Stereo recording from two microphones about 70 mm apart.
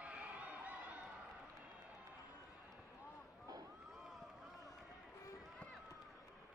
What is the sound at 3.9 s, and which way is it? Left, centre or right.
Run, centre.